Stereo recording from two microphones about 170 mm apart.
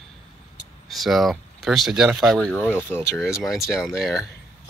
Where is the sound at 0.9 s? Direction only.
Centre (ahead or behind).